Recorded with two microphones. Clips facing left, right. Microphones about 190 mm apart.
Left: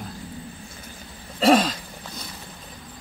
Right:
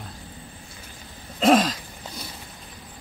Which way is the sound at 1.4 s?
Centre (ahead or behind).